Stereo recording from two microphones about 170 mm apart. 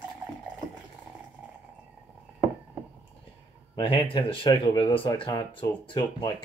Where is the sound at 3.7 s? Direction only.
30° left (ahead or behind).